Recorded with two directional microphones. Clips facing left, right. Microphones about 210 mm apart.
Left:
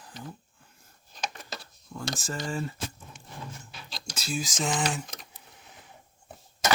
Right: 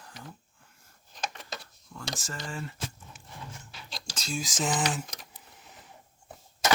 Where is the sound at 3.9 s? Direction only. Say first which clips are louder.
Left 2 dB; 5° left (ahead or behind).